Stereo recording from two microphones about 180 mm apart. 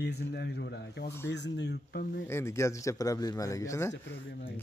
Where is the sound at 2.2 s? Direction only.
15° left (ahead or behind).